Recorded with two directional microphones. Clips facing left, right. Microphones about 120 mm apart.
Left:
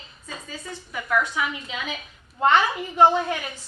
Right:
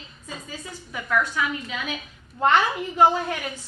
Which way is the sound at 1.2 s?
15° left (ahead or behind).